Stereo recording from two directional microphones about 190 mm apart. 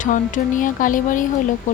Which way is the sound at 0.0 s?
45° left (ahead or behind).